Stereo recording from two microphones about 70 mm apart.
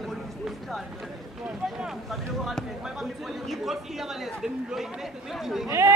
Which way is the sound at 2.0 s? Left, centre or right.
Centre.